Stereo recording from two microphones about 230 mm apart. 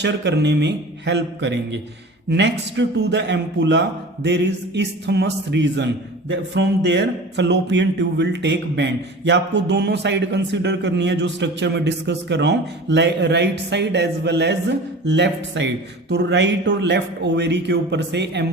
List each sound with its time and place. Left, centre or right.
0.0 s a man's voice: right